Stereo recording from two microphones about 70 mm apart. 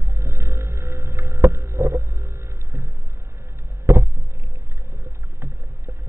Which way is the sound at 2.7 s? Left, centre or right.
Right.